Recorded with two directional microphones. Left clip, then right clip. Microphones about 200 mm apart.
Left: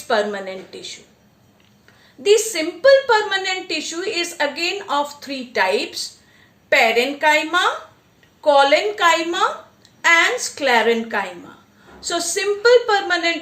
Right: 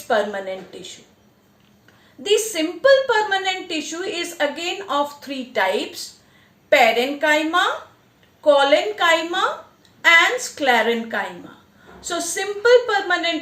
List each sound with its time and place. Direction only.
0.1 s a woman's voice: 35° left (ahead or behind)
2.2 s a woman's voice: 35° left (ahead or behind)